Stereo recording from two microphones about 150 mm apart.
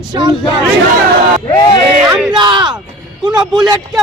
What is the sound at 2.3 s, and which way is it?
Speech, 30° right (ahead or behind).